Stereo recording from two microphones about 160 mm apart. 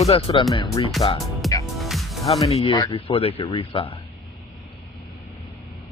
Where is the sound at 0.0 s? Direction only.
35° left (ahead or behind).